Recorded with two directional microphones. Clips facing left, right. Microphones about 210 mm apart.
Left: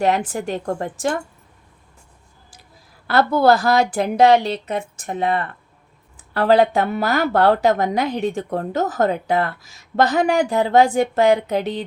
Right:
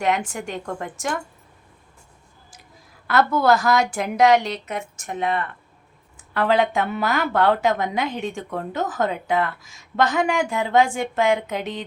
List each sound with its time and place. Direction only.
0.0 s a woman's voice: 35° left (ahead or behind)
3.1 s a woman's voice: 35° left (ahead or behind)